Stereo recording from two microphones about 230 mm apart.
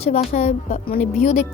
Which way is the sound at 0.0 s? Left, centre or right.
Left.